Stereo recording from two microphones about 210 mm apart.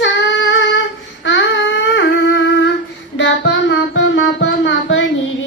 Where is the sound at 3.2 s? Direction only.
60° left (ahead or behind).